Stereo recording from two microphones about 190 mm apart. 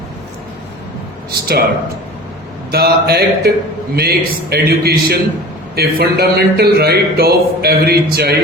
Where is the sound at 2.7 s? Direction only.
55° right (ahead or behind).